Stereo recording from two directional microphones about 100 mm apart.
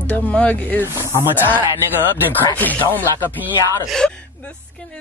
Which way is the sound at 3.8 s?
5° left (ahead or behind).